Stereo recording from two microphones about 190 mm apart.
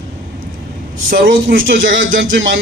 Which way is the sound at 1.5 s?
85° right.